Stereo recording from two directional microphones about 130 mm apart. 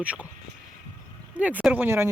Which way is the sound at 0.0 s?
10° right (ahead or behind).